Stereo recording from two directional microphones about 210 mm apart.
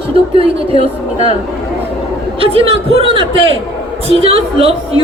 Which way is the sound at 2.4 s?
25° right (ahead or behind).